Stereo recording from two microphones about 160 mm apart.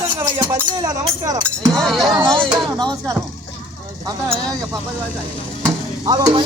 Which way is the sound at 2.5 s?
25° right (ahead or behind).